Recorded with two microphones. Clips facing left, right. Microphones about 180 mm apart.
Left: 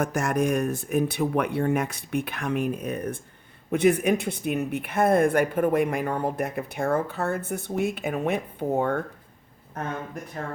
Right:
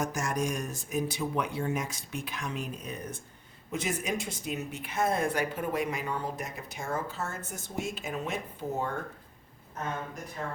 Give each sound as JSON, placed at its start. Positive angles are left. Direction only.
{"t": 0.0, "sound": "speech", "side_deg": 60}